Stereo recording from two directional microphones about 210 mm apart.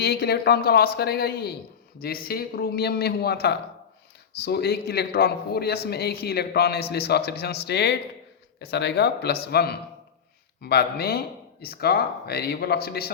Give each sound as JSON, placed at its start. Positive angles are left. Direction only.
{"t": 0.0, "sound": "a man's voice", "side_deg": 50}